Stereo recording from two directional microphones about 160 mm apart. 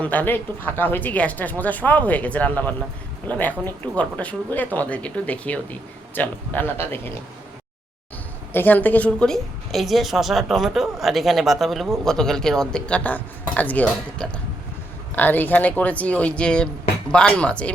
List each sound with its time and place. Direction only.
0.0 s speech: 10° left (ahead or behind)
8.5 s a woman's voice: 10° left (ahead or behind)